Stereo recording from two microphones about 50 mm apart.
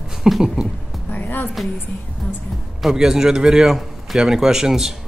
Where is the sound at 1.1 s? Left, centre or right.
Left.